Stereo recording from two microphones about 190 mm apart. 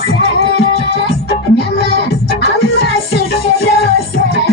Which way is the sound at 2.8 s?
55° left (ahead or behind).